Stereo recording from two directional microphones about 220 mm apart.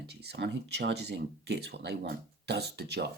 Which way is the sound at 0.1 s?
50° right (ahead or behind).